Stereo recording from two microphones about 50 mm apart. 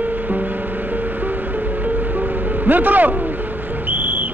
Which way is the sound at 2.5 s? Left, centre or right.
Right.